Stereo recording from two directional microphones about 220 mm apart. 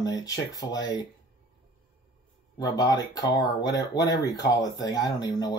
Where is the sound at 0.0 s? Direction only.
15° left (ahead or behind).